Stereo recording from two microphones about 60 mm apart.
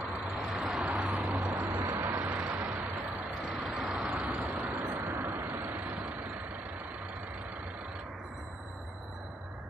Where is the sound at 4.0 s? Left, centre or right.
Right.